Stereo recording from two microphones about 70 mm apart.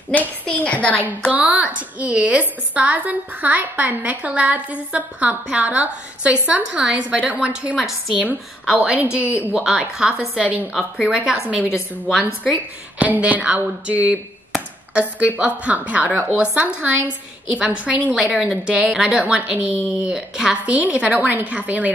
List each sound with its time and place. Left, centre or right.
0.1 s a sound: left
1.3 s a woman's voice: right
9.1 s a woman's voice: centre
10.7 s a woman's voice: centre
13.0 s a woman's voice: right
20.6 s a woman's voice: right